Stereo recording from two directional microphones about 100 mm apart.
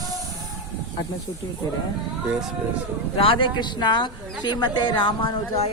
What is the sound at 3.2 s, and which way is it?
Speech, 60° left (ahead or behind).